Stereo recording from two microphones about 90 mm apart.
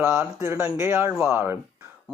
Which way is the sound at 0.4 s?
25° right (ahead or behind).